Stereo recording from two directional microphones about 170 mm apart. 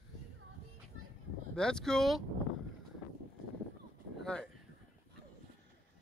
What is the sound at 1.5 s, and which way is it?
Speech, 5° left (ahead or behind).